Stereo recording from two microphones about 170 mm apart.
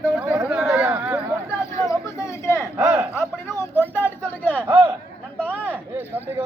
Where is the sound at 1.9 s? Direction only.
15° left (ahead or behind).